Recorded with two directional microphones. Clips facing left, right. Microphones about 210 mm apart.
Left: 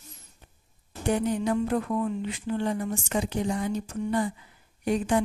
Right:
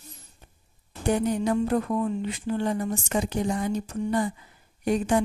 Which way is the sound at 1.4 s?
40° right (ahead or behind).